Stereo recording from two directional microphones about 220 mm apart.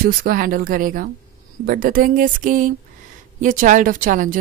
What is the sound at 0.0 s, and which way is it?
A woman's voice, 40° right (ahead or behind).